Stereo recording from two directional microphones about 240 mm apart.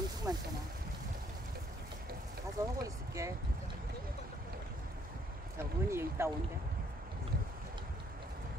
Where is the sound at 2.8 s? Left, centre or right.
Centre.